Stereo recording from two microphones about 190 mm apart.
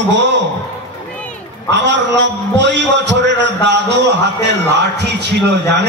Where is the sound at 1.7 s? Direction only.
70° right (ahead or behind).